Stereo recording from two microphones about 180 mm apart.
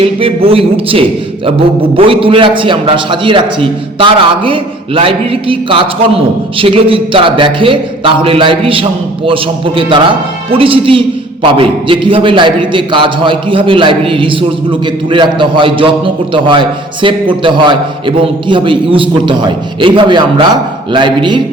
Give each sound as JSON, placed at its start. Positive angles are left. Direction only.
{"t": 0.0, "sound": "a man's voice", "side_deg": -30}